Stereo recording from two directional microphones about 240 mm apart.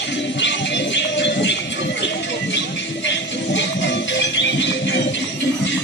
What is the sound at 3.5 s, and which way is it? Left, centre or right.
Music, left.